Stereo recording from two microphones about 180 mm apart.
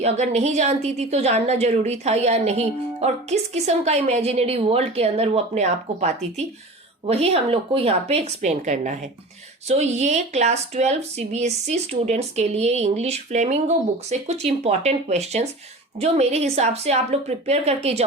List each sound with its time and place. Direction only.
0.0 s a woman's voice: 40° right (ahead or behind)